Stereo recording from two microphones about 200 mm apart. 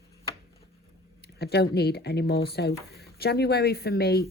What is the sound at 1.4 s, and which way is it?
A woman's voice, 55° left (ahead or behind).